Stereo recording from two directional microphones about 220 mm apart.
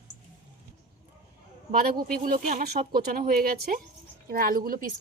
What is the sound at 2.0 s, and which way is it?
Speech, 40° right (ahead or behind).